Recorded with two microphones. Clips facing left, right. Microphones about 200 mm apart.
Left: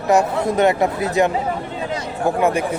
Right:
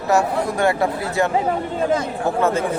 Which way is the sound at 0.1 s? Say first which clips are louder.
Left 2 dB; 20° left (ahead or behind).